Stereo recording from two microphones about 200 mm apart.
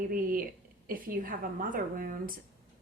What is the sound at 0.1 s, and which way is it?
A woman's voice, 45° right (ahead or behind).